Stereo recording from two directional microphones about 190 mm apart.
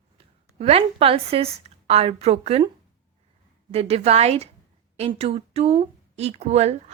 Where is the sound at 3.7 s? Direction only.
35° right (ahead or behind).